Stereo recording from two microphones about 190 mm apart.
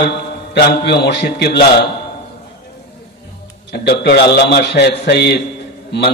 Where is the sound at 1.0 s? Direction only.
60° left (ahead or behind).